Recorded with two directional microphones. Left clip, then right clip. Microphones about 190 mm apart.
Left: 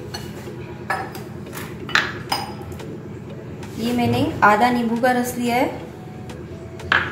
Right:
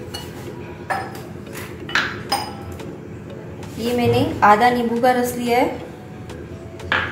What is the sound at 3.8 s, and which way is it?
A woman's voice, centre (ahead or behind).